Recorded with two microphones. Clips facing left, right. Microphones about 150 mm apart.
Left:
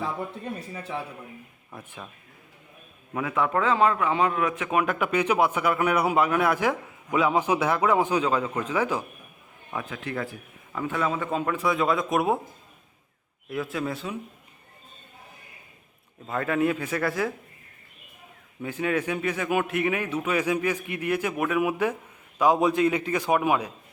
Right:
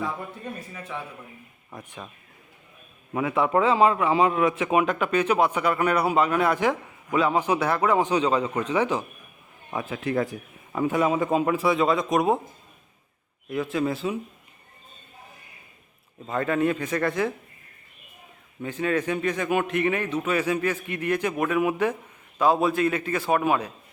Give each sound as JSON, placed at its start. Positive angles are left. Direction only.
{"t": 0.7, "sound": "a man's voice", "side_deg": 30}
{"t": 3.1, "sound": "a man's voice", "side_deg": -10}
{"t": 4.9, "sound": "a man's voice", "side_deg": 10}
{"t": 10.2, "sound": "a man's voice", "side_deg": -20}
{"t": 13.5, "sound": "a man's voice", "side_deg": 0}
{"t": 16.2, "sound": "a man's voice", "side_deg": 0}
{"t": 18.6, "sound": "a man's voice", "side_deg": 10}